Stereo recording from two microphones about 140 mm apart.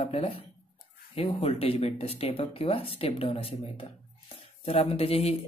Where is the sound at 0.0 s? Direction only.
45° left (ahead or behind).